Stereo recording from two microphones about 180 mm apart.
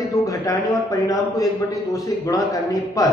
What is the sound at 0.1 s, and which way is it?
A man's voice, 20° left (ahead or behind).